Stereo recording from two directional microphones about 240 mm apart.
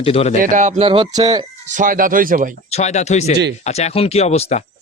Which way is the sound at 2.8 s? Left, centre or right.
Left.